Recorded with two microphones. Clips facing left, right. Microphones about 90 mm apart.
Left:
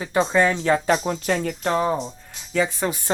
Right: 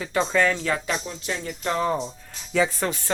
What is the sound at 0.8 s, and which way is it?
Speech, 45° left (ahead or behind).